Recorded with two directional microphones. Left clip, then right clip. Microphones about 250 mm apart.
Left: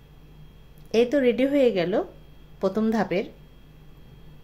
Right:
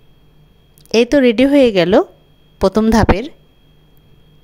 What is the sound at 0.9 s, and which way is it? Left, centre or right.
Speech, right.